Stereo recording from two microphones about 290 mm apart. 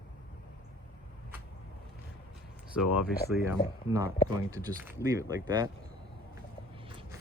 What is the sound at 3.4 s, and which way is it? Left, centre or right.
Speech, centre.